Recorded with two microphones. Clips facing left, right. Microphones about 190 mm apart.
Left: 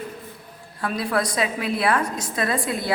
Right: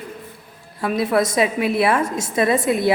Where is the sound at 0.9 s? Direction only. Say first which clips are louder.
Right 6 dB; 25° right (ahead or behind).